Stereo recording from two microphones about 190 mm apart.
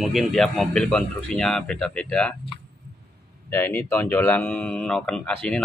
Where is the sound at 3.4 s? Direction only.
10° left (ahead or behind).